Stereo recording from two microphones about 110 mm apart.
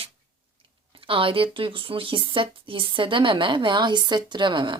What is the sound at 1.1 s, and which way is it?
Speech, 55° right (ahead or behind).